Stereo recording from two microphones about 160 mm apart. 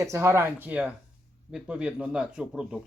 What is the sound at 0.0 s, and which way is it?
Speech, 20° right (ahead or behind).